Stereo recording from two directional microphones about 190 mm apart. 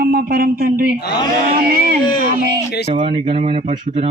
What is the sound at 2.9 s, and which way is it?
Speech, 30° right (ahead or behind).